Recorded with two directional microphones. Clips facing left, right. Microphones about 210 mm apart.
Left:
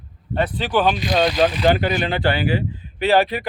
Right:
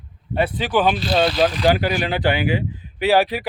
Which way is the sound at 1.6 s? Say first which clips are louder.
Even; 10° right (ahead or behind).